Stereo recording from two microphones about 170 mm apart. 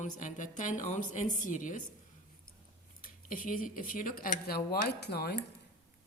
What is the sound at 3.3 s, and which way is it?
Speech, 55° left (ahead or behind).